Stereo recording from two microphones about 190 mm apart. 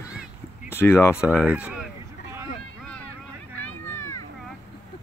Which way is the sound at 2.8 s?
5° left (ahead or behind).